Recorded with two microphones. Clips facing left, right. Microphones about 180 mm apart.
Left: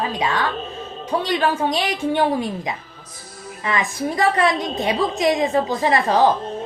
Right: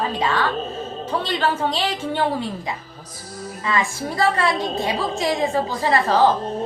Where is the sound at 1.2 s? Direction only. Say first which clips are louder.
Left 2 dB; 15° left (ahead or behind).